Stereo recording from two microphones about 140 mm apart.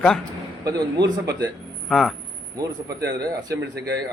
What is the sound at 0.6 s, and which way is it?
Speech, 25° right (ahead or behind).